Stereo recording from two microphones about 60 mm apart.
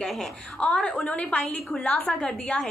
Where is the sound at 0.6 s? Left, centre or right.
Centre.